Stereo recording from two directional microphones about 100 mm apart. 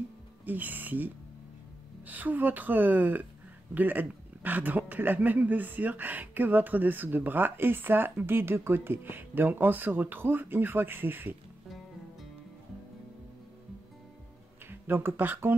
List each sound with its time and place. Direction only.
0.5 s a woman's voice: 15° right (ahead or behind)
14.7 s speech: 20° right (ahead or behind)